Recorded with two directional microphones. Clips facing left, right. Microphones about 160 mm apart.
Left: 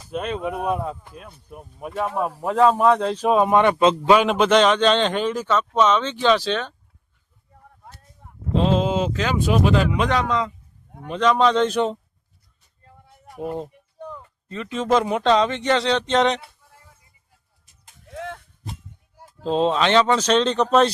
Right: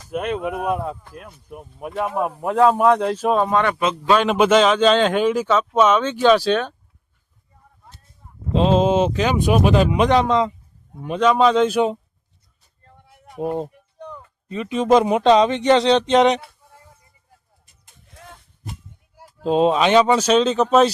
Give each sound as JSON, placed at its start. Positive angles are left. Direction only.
{"t": 0.1, "sound": "speech", "side_deg": -10}
{"t": 3.2, "sound": "speech", "side_deg": 5}
{"t": 3.5, "sound": "speech", "side_deg": 20}
{"t": 4.3, "sound": "speech", "side_deg": -5}
{"t": 8.2, "sound": "a sound", "side_deg": 65}
{"t": 8.5, "sound": "speech", "side_deg": -20}
{"t": 11.0, "sound": "speech", "side_deg": -10}
{"t": 13.3, "sound": "speech", "side_deg": 0}
{"t": 13.7, "sound": "a sound", "side_deg": 5}
{"t": 14.4, "sound": "speech", "side_deg": -15}
{"t": 17.8, "sound": "a sound", "side_deg": 90}
{"t": 19.1, "sound": "speech", "side_deg": -10}